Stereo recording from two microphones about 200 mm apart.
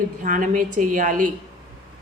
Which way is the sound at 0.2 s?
40° right (ahead or behind).